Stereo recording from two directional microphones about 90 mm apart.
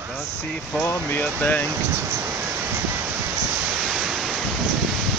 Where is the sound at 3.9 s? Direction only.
5° right (ahead or behind).